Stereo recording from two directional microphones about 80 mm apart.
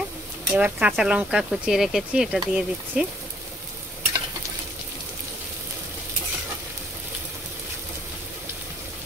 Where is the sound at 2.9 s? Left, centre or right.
Centre.